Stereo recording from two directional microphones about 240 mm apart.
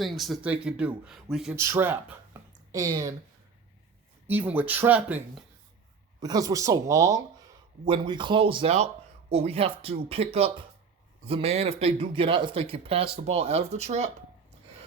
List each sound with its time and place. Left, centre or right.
0.0 s speech: centre
2.3 s a sound: centre
2.7 s speech: centre
4.3 s speech: centre
6.1 s speech: centre